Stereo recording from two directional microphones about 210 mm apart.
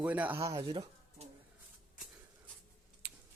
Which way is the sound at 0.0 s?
5° right (ahead or behind).